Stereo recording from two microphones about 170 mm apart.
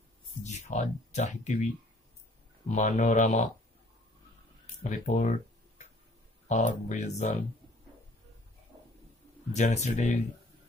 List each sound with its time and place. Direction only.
0.4 s speech: 45° left (ahead or behind)
2.7 s speech: 45° left (ahead or behind)
4.8 s speech: 50° left (ahead or behind)
6.5 s speech: 45° left (ahead or behind)
9.5 s speech: 40° left (ahead or behind)